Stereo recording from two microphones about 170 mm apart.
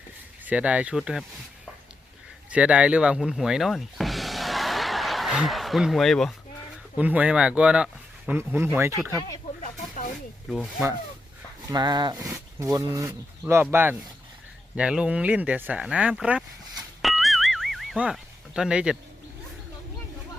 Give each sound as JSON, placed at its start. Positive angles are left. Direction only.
{"t": 0.4, "sound": "speech", "side_deg": -10}
{"t": 2.5, "sound": "speech", "side_deg": -5}
{"t": 6.9, "sound": "speech", "side_deg": -10}
{"t": 9.6, "sound": "snake", "side_deg": 50}
{"t": 10.5, "sound": "speech", "side_deg": 0}
{"t": 11.7, "sound": "speech", "side_deg": -25}
{"t": 17.0, "sound": "a sound", "side_deg": 0}